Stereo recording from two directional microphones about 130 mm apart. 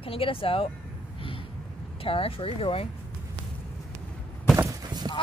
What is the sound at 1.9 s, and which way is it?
Speech, 45° left (ahead or behind).